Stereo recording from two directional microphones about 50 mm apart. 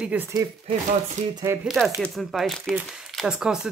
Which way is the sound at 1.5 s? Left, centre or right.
Right.